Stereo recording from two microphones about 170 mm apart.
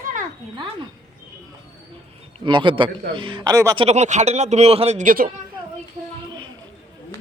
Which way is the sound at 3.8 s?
40° right (ahead or behind).